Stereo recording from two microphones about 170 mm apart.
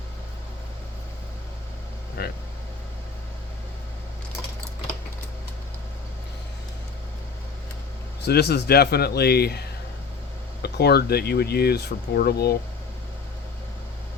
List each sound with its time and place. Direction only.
2.2 s speech: 65° left (ahead or behind)
8.2 s speech: 75° left (ahead or behind)